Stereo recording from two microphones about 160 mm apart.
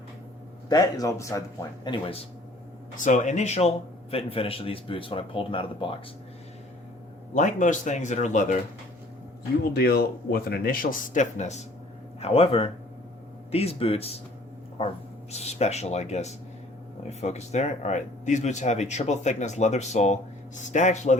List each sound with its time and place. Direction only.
0.7 s speech: 25° left (ahead or behind)
2.9 s a man's voice: 55° left (ahead or behind); by 5.9 s 35° left (ahead or behind)
7.3 s speech: 50° left (ahead or behind)
9.7 s a man's voice: 75° left (ahead or behind); by 14.2 s 40° left (ahead or behind)
15.3 s speech: 40° left (ahead or behind)